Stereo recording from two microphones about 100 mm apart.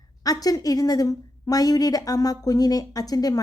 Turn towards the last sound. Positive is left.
turn(degrees=40)  # may be behind; listen again after turning